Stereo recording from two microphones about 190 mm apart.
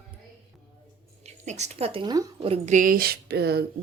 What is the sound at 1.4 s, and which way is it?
A woman's voice, 35° right (ahead or behind).